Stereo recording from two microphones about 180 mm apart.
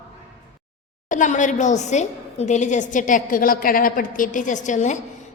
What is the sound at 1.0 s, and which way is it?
A woman's voice, 45° left (ahead or behind).